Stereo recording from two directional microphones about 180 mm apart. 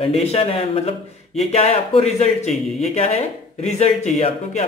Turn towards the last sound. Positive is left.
turn(degrees=35)  # may be behind; listen again after turning